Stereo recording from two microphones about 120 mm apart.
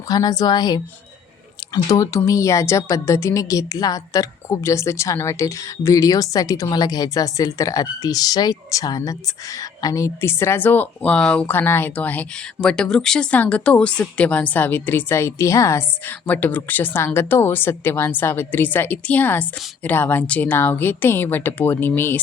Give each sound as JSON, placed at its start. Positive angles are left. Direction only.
{"t": 0.1, "sound": "a woman's voice", "side_deg": 35}